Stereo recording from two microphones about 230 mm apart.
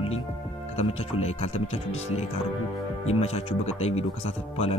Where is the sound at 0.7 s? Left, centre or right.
Left.